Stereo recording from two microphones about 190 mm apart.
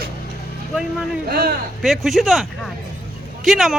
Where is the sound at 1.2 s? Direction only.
55° right (ahead or behind).